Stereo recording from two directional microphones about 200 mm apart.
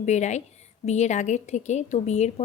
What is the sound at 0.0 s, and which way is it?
A woman's voice, 35° left (ahead or behind).